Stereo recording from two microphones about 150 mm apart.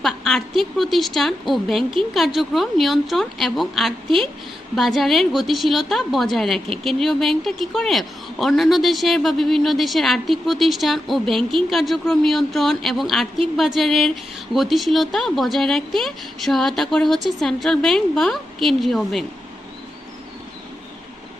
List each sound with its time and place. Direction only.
0.0 s a woman's voice: centre (ahead or behind)